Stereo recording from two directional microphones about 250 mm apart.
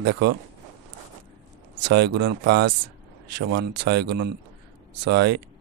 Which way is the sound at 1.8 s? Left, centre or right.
Right.